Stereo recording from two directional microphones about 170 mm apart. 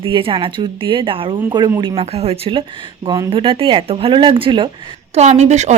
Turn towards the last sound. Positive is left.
turn(degrees=-40)  # may be behind; listen again after turning